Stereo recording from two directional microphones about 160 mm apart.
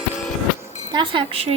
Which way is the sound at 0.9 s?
30° right (ahead or behind).